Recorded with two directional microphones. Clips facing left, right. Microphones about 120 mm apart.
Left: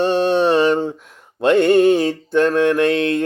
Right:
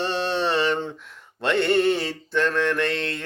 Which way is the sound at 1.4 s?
45° left (ahead or behind).